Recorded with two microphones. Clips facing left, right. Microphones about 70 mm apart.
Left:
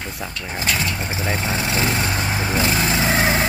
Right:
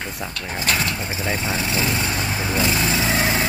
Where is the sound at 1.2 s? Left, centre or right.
Centre.